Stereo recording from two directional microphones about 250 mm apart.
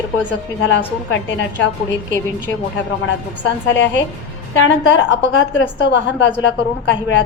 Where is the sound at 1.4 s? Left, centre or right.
Left.